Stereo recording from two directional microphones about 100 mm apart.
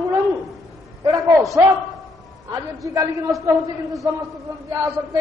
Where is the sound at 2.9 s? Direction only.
25° right (ahead or behind).